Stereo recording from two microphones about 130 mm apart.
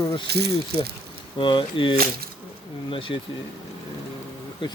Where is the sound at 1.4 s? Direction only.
40° left (ahead or behind).